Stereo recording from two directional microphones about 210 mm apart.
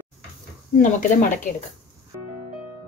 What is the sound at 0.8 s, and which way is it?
Speech, 35° left (ahead or behind).